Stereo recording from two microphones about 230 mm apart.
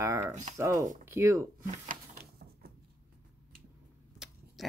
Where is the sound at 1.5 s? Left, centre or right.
Right.